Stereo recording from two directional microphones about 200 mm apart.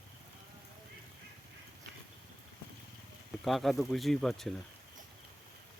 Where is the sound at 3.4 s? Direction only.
Centre (ahead or behind).